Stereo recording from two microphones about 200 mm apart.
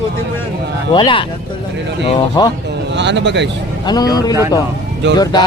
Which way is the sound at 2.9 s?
60° right (ahead or behind).